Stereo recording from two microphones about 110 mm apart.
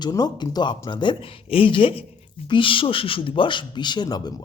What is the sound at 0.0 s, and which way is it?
Speech, 40° left (ahead or behind).